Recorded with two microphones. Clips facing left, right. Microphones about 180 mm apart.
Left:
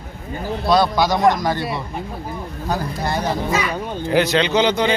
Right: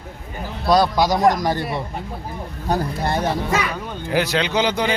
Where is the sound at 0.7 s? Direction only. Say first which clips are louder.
Even; 40° right (ahead or behind).